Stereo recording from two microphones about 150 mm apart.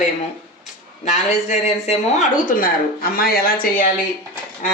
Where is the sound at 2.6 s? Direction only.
75° left (ahead or behind).